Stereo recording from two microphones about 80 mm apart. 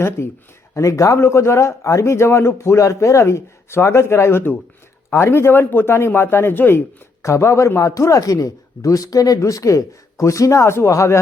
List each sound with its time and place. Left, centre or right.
0.2 s a man's voice: left
7.2 s speech: left